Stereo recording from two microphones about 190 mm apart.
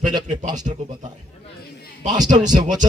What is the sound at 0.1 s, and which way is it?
Speech, 20° right (ahead or behind).